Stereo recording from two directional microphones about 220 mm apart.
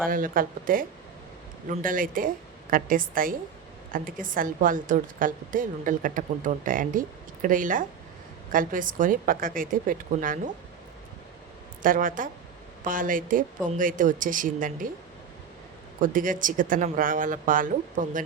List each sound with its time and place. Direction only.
0.1 s a woman's voice: 40° right (ahead or behind)
11.8 s a woman's voice: 40° right (ahead or behind)
16.0 s a woman's voice: 35° right (ahead or behind)